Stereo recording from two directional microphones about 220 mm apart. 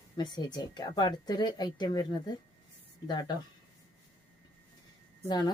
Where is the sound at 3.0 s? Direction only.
20° left (ahead or behind).